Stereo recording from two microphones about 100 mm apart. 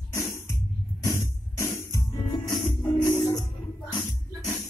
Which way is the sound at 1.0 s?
35° left (ahead or behind).